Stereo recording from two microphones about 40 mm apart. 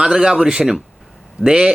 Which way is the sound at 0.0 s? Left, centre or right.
Centre.